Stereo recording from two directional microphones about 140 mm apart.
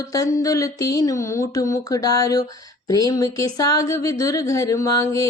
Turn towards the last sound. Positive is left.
turn(degrees=25)  # may be behind; listen again after turning